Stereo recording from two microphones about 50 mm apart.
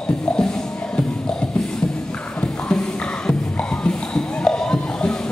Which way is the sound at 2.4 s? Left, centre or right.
Centre.